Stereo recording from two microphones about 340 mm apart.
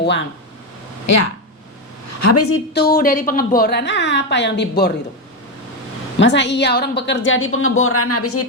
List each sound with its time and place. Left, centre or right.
0.0 s speech: left
1.0 s a woman's voice: left
2.7 s a woman's voice: left
6.1 s a woman's voice: left